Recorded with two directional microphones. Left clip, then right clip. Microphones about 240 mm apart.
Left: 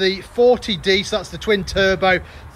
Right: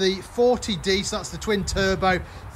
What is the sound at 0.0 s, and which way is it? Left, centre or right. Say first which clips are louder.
Speech: left 5 dB; centre.